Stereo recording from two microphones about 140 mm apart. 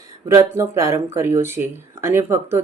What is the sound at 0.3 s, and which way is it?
Speech, 20° right (ahead or behind).